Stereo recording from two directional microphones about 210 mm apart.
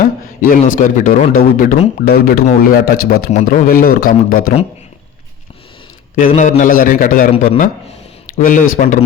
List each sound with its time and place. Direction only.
0.0 s a man's voice: 40° left (ahead or behind)
6.1 s a man's voice: 35° left (ahead or behind)